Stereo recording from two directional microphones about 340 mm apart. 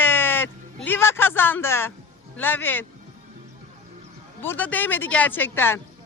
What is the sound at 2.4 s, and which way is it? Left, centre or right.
Speech, centre.